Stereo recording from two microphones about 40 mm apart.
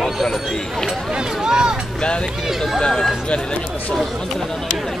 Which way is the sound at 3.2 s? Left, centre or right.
Left.